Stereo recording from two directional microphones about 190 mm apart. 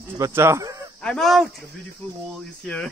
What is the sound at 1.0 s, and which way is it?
Speech, 5° left (ahead or behind).